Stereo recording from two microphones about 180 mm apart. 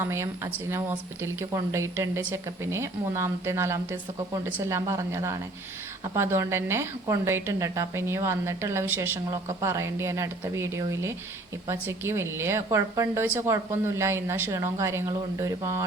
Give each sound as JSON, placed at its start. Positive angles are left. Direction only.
{"t": 0.0, "sound": "a woman's voice", "side_deg": -15}